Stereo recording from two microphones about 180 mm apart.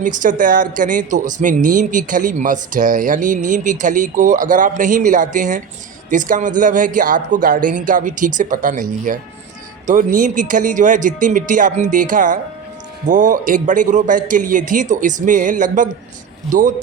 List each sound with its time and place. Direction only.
0.0 s speech: 45° right (ahead or behind)